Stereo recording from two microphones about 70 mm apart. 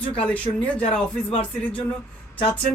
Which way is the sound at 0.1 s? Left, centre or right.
Centre.